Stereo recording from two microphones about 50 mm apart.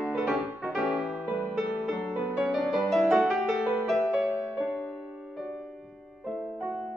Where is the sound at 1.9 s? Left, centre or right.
Centre.